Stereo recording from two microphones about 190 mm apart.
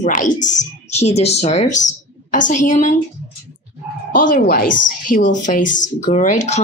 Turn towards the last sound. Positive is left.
turn(degrees=40)  # may be behind; listen again after turning